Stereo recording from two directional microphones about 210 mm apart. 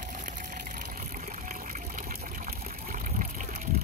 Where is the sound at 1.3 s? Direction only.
35° right (ahead or behind).